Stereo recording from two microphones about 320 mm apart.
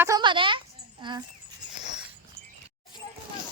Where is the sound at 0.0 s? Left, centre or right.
Centre.